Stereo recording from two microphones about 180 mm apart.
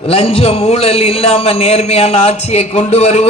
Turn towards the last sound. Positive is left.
turn(degrees=40)  # may be behind; listen again after turning